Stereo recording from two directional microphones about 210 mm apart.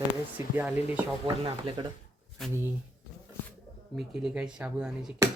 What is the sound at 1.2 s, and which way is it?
Speech, 25° right (ahead or behind).